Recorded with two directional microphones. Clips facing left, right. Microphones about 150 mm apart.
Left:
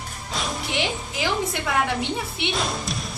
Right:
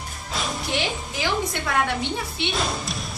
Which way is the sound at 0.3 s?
Centre (ahead or behind).